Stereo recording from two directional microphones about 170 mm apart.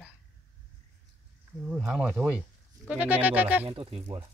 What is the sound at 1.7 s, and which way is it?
Speech, 5° right (ahead or behind).